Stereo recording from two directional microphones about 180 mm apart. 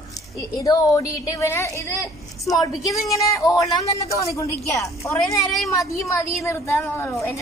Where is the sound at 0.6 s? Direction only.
20° left (ahead or behind).